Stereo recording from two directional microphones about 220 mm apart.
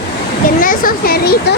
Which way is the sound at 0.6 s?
40° left (ahead or behind).